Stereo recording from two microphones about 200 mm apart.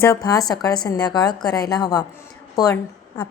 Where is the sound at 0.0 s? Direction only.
15° left (ahead or behind).